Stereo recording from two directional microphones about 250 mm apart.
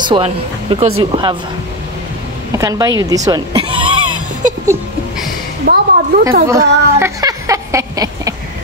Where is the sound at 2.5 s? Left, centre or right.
Centre.